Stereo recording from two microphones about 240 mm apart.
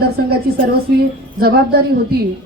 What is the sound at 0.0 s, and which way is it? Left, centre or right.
A woman's voice, right.